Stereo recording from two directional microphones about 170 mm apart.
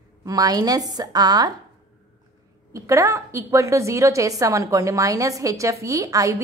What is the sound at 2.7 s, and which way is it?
A woman's voice, 20° right (ahead or behind).